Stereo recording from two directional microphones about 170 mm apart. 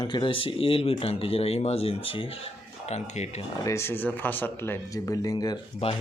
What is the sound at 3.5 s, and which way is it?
Speech, 20° left (ahead or behind).